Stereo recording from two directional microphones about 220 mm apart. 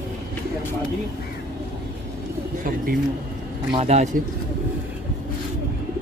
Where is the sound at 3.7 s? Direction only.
30° right (ahead or behind).